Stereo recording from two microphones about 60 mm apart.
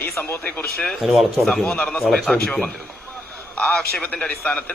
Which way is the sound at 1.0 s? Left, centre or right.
Centre.